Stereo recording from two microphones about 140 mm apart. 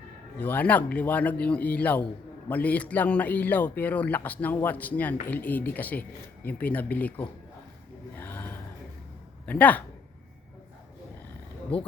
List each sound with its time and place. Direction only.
0.3 s a man's voice: 10° left (ahead or behind)
8.2 s chant: 15° left (ahead or behind)
9.5 s a man's voice: 10° left (ahead or behind)